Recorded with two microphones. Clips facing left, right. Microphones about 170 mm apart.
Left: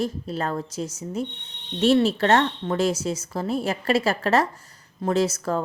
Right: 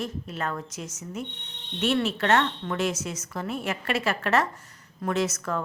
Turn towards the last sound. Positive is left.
turn(degrees=30)  # may be behind; listen again after turning